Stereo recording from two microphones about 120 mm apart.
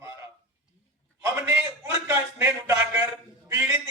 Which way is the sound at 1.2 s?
25° right (ahead or behind).